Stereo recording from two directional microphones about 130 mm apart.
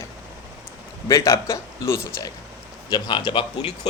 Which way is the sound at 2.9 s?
35° left (ahead or behind).